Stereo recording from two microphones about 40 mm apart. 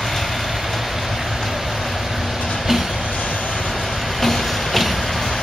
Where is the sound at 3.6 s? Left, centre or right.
Centre.